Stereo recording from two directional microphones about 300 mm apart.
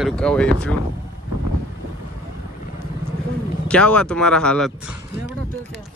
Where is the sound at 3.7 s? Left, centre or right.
Centre.